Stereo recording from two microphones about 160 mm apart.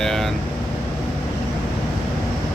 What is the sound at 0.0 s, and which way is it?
Vehicle, centre (ahead or behind).